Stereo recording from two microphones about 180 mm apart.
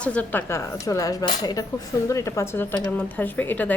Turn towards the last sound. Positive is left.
turn(degrees=10)  # may be behind; listen again after turning